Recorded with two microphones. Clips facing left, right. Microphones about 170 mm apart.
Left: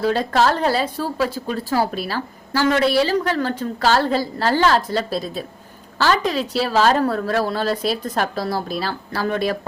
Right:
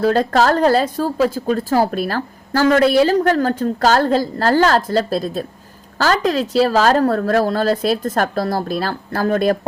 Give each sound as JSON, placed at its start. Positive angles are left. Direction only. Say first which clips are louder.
{"t": 0.0, "sound": "a woman's voice", "louder": "right 3 dB", "side_deg": -45}